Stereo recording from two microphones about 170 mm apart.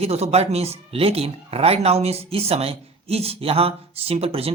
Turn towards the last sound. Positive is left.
turn(degrees=-35)  # may be behind; listen again after turning